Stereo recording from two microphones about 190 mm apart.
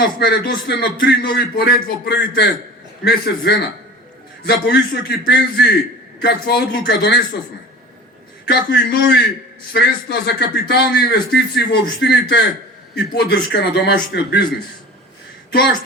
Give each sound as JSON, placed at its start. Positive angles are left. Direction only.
{"t": 0.0, "sound": "speech", "side_deg": 55}
{"t": 8.4, "sound": "speech", "side_deg": 60}